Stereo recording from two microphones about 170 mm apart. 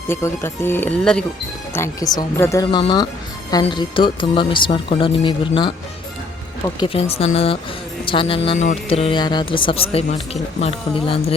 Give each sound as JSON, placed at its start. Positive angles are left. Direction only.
{"t": 0.1, "sound": "speech", "side_deg": 15}
{"t": 1.7, "sound": "speech", "side_deg": 20}
{"t": 6.7, "sound": "speech", "side_deg": 30}
{"t": 8.5, "sound": "speech", "side_deg": 40}